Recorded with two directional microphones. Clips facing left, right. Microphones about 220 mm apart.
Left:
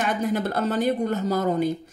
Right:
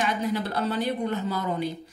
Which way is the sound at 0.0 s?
50° left (ahead or behind).